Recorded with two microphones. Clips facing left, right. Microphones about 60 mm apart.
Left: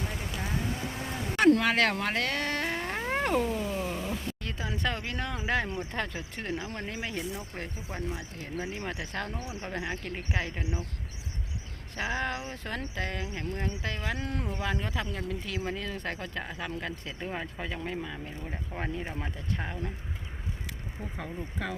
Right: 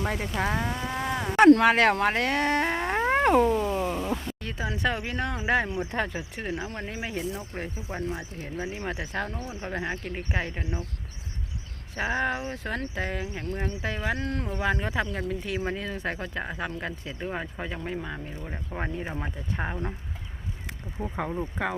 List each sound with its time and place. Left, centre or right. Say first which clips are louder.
0.0 s cattle: right 8 dB; right
1.6 s speech: right 6 dB; centre
3.1 s cat: right 7 dB; right
3.7 s speech: right 5 dB; centre
9.3 s speech: right 3 dB; centre
11.9 s speech: right 4 dB; centre
14.2 s speech: right 3 dB; centre
14.6 s speech: right 8 dB; centre
19.5 s speech: right 7 dB; right
20.7 s speech: right 5 dB; right